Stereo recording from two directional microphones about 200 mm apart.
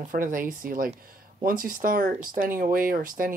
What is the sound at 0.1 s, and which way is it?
Speech, 45° right (ahead or behind).